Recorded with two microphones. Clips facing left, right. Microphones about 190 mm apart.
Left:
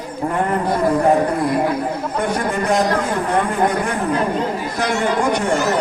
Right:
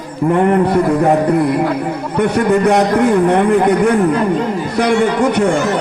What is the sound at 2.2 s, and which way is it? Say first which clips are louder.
Speech: right 10 dB; 65° right (ahead or behind).